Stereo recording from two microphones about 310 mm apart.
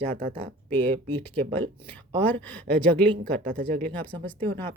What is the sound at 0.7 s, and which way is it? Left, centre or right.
Speech, centre.